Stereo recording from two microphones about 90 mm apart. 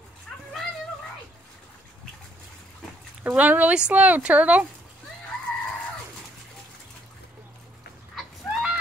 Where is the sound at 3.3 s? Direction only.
20° right (ahead or behind).